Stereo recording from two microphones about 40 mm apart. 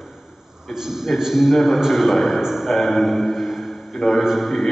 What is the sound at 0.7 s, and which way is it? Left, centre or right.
A man's voice, centre.